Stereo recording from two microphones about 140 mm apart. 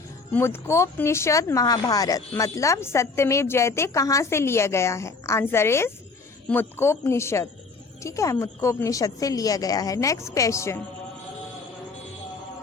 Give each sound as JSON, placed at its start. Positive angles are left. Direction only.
{"t": 0.3, "sound": "speech", "side_deg": 15}